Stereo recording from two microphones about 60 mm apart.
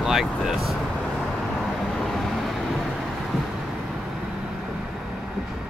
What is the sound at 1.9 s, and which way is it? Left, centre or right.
Vehicle, centre.